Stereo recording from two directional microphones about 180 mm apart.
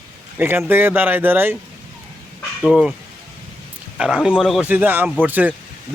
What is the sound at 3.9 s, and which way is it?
A man's voice, 5° right (ahead or behind).